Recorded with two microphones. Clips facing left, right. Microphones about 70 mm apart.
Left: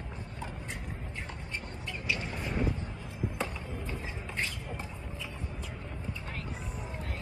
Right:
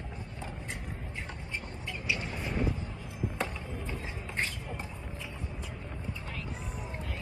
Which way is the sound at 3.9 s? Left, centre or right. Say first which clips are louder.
Even; right.